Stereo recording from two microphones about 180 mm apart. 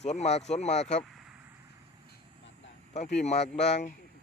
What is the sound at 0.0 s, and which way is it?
Speech, 40° left (ahead or behind).